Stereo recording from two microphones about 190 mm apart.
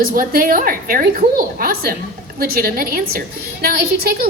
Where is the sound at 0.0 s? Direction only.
50° right (ahead or behind).